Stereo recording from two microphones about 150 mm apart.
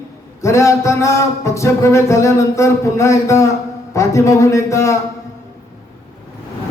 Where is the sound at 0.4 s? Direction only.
20° left (ahead or behind).